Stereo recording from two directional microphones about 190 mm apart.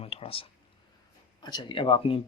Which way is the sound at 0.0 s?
30° left (ahead or behind).